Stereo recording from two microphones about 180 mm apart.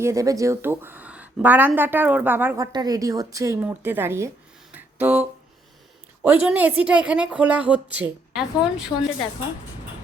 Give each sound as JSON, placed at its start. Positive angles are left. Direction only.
{"t": 0.0, "sound": "a woman's voice", "side_deg": -15}
{"t": 4.7, "sound": "a sound", "side_deg": -10}
{"t": 6.2, "sound": "a woman's voice", "side_deg": -10}